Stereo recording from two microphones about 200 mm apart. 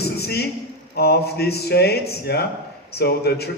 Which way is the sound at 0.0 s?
55° left (ahead or behind).